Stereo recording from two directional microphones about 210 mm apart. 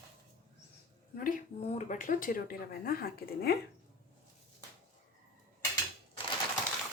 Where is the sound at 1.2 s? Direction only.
35° left (ahead or behind).